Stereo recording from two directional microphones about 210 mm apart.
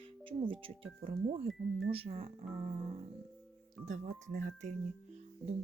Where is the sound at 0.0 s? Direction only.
25° right (ahead or behind).